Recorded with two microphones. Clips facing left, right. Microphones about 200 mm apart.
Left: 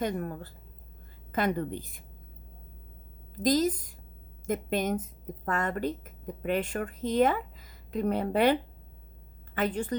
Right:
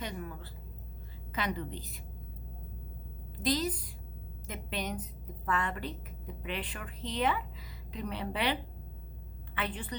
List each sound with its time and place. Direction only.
0.0 s a woman's voice: 50° left (ahead or behind)
3.3 s a woman's voice: 45° left (ahead or behind)
9.6 s a woman's voice: 45° left (ahead or behind)